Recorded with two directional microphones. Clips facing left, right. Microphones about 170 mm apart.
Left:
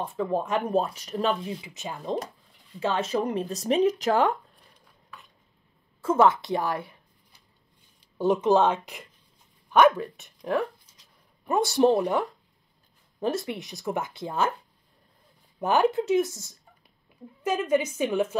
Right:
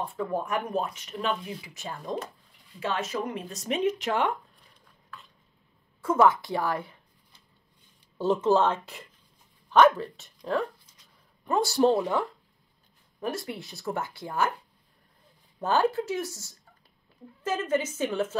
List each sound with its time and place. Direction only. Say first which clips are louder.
0.0 s speech: left 3 dB; 25° left (ahead or behind)
2.8 s speech: left 4 dB; 30° left (ahead or behind)
6.0 s speech: left 1 dB; 25° left (ahead or behind)
8.2 s a woman's voice: left 2 dB; 15° left (ahead or behind)
15.6 s a woman's voice: left 2 dB; 15° left (ahead or behind)